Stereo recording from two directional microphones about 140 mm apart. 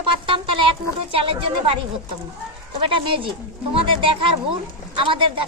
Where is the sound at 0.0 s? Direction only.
40° right (ahead or behind).